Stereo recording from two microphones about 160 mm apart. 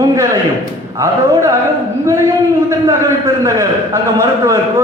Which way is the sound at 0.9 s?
20° right (ahead or behind).